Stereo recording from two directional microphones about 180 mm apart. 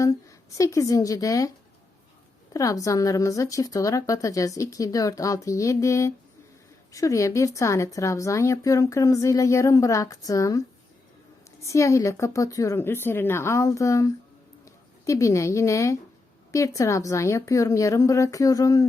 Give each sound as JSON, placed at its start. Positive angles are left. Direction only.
{"t": 0.0, "sound": "a woman's voice", "side_deg": 20}
{"t": 11.6, "sound": "a woman's voice", "side_deg": 15}